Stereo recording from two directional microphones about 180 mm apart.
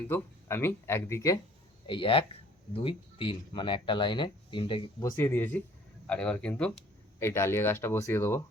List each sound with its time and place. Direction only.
0.1 s speech: 15° left (ahead or behind)
1.9 s speech: 30° left (ahead or behind); by 8.4 s 15° left (ahead or behind)